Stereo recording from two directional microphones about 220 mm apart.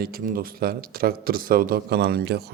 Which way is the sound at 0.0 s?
40° right (ahead or behind).